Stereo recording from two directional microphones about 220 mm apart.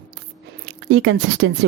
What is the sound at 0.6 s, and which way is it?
Speech, 55° right (ahead or behind).